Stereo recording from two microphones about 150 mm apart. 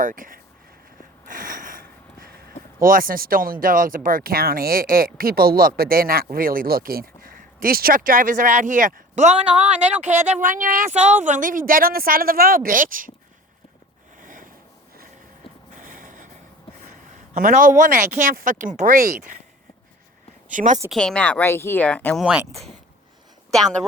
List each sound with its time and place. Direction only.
0.0 s speech: 65° right (ahead or behind)
1.3 s a sound: 65° right (ahead or behind)
2.8 s speech: 70° right (ahead or behind)
14.2 s a sound: 65° right (ahead or behind)
15.7 s a sound: 65° right (ahead or behind)
16.8 s a man's voice: 60° right (ahead or behind)
20.5 s speech: 60° right (ahead or behind)
20.9 s speech: 5° left (ahead or behind)
22.2 s speech: 5° right (ahead or behind)